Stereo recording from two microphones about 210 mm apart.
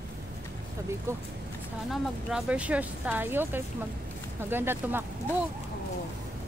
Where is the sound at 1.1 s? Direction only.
10° right (ahead or behind).